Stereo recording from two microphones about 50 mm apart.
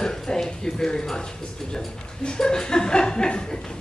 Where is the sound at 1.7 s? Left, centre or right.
Centre.